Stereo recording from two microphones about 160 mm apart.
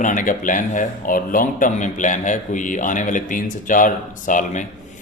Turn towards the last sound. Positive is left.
turn(degrees=50)  # may be behind; listen again after turning